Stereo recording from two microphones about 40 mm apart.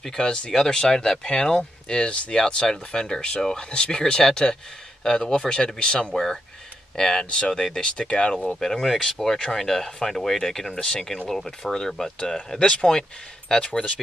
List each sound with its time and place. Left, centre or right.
0.0 s speech: centre; by 8.5 s left
8.5 s speech: centre